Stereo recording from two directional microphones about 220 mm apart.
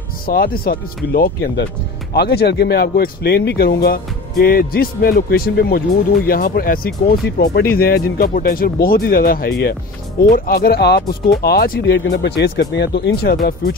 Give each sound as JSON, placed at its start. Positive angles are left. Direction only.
{"t": 0.3, "sound": "speech", "side_deg": 45}